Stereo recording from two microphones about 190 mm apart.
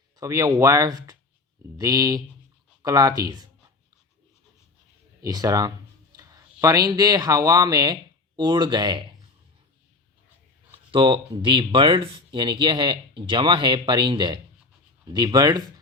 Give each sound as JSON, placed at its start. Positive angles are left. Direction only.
{"t": 0.2, "sound": "speech", "side_deg": -15}
{"t": 5.2, "sound": "speech", "side_deg": -20}
{"t": 10.9, "sound": "speech", "side_deg": -25}